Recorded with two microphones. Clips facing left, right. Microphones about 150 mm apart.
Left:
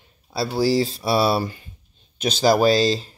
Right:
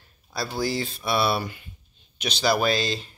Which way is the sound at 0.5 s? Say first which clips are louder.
Left 9 dB; 35° left (ahead or behind).